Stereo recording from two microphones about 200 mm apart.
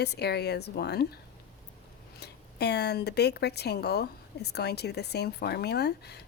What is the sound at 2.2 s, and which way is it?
Speech, 55° left (ahead or behind).